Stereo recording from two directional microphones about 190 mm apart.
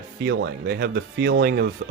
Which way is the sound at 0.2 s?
60° right (ahead or behind).